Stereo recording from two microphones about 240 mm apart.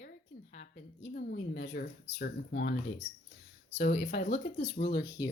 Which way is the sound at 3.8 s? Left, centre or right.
Left.